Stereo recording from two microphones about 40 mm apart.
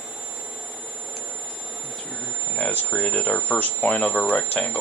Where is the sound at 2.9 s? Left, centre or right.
Left.